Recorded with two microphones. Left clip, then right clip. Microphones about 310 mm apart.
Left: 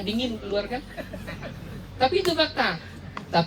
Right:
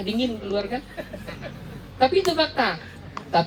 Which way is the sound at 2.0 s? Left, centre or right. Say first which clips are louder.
Right 2 dB; right.